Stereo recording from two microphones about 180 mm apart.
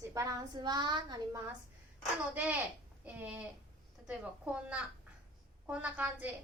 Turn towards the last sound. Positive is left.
turn(degrees=-10)  # may be behind; listen again after turning